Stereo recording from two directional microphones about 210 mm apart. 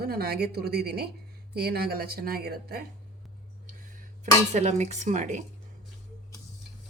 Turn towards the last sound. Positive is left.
turn(degrees=-35)  # may be behind; listen again after turning